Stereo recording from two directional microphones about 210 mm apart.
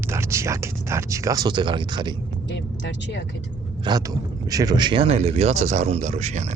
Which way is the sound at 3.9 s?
20° right (ahead or behind).